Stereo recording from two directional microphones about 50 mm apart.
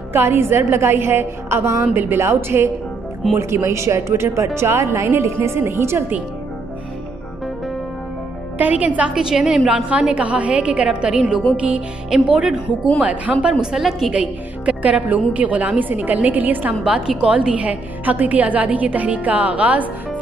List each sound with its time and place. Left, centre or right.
0.1 s a woman's voice: right
5.6 s a woman's voice: right
8.5 s a woman's voice: right
9.1 s a woman's voice: centre
9.7 s a woman's voice: right
11.5 s a woman's voice: right
13.0 s a woman's voice: right
13.4 s a woman's voice: centre
14.1 s a woman's voice: right
16.8 s a woman's voice: centre